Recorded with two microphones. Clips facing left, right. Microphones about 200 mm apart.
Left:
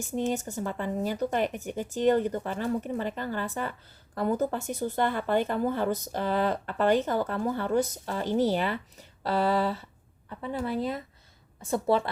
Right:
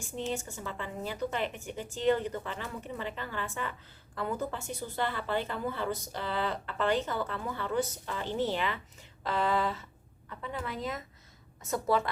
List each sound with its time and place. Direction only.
0.3 s a woman's voice: 40° left (ahead or behind)